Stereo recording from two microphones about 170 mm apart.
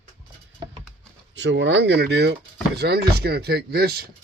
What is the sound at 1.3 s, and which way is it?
Speech, 90° right.